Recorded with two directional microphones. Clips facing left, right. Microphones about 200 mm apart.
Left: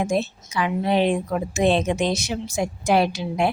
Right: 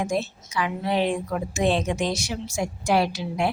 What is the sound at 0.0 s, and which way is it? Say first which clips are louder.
A woman's voice: left 3 dB; 20° left (ahead or behind).